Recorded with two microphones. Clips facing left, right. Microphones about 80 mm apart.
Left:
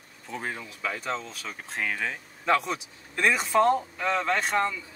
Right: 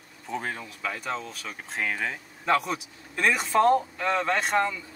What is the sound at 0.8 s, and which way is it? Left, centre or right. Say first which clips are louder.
Speech: left 1 dB; centre.